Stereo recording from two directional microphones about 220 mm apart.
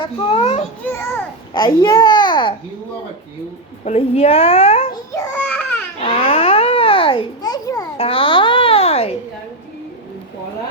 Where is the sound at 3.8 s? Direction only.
30° left (ahead or behind).